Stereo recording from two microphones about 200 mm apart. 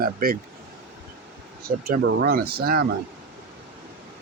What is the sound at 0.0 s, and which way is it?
Speech, 45° right (ahead or behind).